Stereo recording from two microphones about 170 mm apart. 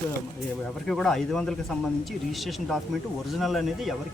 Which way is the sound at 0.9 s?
5° left (ahead or behind).